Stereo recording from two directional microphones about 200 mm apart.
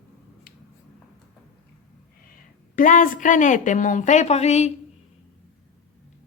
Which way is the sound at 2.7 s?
40° left (ahead or behind).